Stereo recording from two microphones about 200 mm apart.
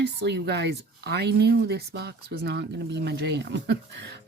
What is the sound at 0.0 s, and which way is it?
Speech, 55° right (ahead or behind).